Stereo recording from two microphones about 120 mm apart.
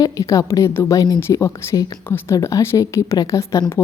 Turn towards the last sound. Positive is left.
turn(degrees=25)  # may be behind; listen again after turning